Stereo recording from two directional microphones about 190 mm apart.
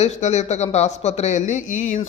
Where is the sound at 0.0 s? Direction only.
35° left (ahead or behind).